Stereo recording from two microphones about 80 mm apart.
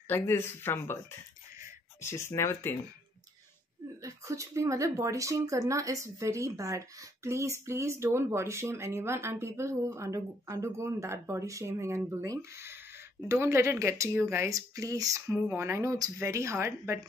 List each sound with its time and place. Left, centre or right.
0.1 s speech: left
2.0 s speech: left
4.0 s speech: right